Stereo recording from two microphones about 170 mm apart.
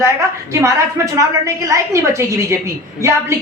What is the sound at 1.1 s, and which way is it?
A woman's voice, 20° right (ahead or behind).